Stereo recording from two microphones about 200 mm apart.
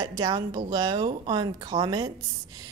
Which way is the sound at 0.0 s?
20° right (ahead or behind).